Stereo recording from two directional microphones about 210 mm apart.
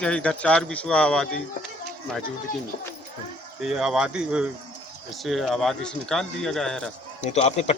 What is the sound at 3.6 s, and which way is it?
Speech, centre (ahead or behind).